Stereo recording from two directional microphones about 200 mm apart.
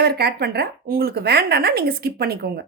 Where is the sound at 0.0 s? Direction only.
55° right (ahead or behind).